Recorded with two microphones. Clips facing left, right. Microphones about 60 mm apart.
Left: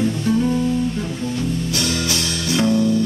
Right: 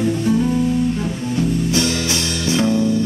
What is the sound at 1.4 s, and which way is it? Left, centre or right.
Music, right.